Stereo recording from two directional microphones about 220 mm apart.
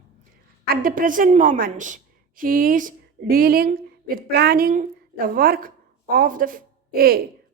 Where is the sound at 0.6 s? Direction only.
40° right (ahead or behind).